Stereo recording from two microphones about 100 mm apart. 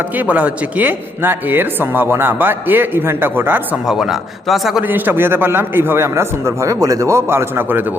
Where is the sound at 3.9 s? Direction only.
5° right (ahead or behind).